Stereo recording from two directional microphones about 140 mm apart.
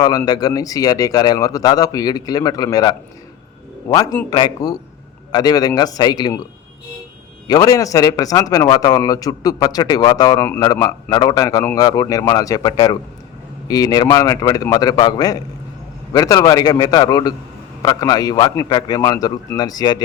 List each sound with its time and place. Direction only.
0.3 s a man's voice: 25° left (ahead or behind)
7.4 s a man's voice: 25° left (ahead or behind)